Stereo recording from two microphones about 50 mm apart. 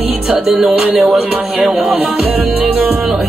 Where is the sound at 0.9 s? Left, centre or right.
Centre.